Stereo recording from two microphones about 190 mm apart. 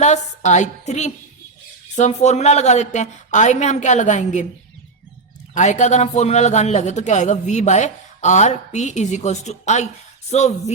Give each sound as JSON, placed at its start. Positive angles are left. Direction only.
{"t": 0.0, "sound": "a man's voice", "side_deg": 40}
{"t": 5.5, "sound": "a man's voice", "side_deg": 40}